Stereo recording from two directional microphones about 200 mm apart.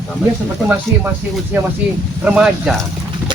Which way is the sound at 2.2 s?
5° right (ahead or behind).